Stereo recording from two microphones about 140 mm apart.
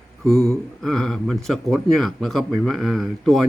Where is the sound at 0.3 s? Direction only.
20° right (ahead or behind).